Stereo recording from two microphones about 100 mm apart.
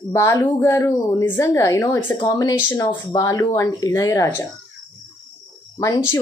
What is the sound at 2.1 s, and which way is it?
A woman's voice, 50° left (ahead or behind).